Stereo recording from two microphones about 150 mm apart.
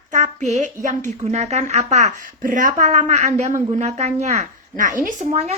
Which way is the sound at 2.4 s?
60° right (ahead or behind).